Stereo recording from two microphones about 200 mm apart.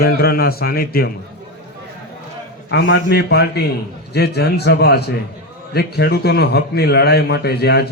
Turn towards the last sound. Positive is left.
turn(degrees=55)  # may be behind; listen again after turning